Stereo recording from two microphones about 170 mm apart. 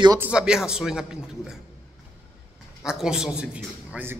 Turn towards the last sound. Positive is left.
turn(degrees=-10)  # may be behind; listen again after turning